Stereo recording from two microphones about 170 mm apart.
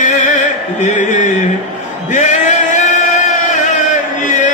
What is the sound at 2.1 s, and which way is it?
Male singing, 45° left (ahead or behind).